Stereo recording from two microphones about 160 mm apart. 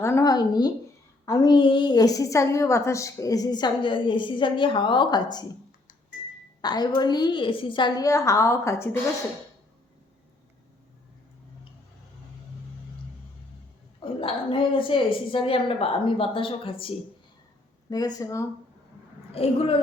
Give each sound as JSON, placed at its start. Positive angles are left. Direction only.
{"t": 0.0, "sound": "a woman's voice", "side_deg": 20}
{"t": 6.6, "sound": "a woman's voice", "side_deg": 25}
{"t": 14.0, "sound": "a woman's voice", "side_deg": 35}
{"t": 17.8, "sound": "a woman's voice", "side_deg": 25}
{"t": 19.3, "sound": "a woman's voice", "side_deg": 40}